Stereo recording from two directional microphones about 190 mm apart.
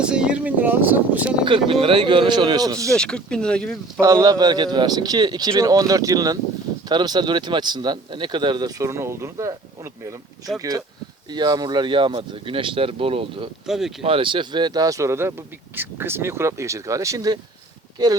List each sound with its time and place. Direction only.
0.0 s speech: 5° right (ahead or behind)
1.5 s speech: 25° right (ahead or behind)
2.9 s speech: 5° left (ahead or behind)
4.0 s speech: 20° right (ahead or behind)
13.7 s speech: centre (ahead or behind)
14.0 s speech: 30° right (ahead or behind)